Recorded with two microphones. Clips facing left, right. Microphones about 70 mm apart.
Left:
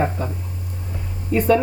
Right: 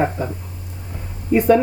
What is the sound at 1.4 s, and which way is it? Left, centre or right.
Speech, centre.